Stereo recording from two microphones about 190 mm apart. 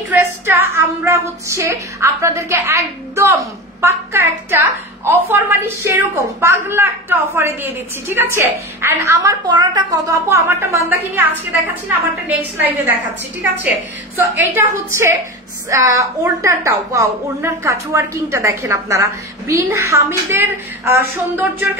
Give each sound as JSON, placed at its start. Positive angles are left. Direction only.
{"t": 0.1, "sound": "a woman's voice", "side_deg": -15}
{"t": 12.4, "sound": "a woman's voice", "side_deg": -10}